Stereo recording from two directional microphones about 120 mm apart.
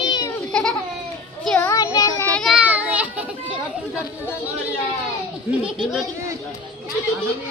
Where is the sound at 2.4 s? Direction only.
10° right (ahead or behind).